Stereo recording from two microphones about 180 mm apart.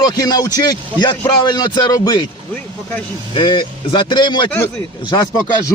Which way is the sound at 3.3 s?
25° left (ahead or behind).